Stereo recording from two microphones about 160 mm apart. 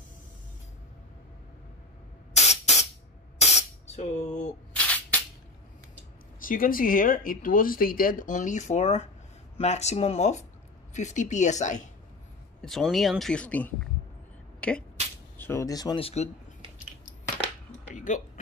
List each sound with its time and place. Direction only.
2.3 s spray: 45° left (ahead or behind)
4.7 s music: 10° left (ahead or behind)
6.4 s speech: 60° left (ahead or behind)
12.6 s speech: centre (ahead or behind); by 16.0 s 25° left (ahead or behind)
16.0 s speech: 40° left (ahead or behind)
17.9 s a sound: 50° left (ahead or behind)